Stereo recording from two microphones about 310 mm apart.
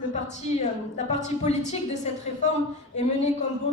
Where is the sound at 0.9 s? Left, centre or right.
Left.